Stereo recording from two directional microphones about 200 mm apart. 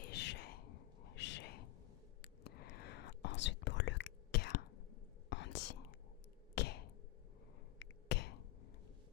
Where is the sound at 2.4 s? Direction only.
55° left (ahead or behind).